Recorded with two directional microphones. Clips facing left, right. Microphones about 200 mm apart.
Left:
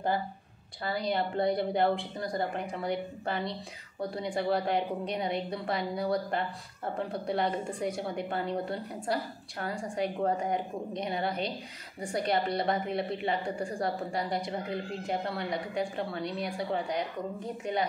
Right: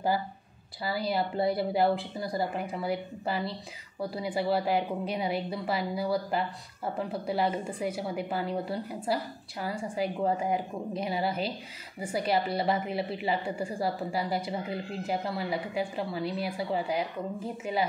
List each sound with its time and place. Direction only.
0.8 s a woman's voice: 5° right (ahead or behind)